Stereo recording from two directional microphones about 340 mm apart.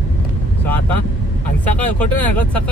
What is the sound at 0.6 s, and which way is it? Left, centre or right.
Speech, centre.